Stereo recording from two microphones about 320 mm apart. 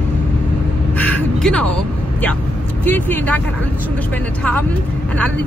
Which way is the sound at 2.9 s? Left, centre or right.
Centre.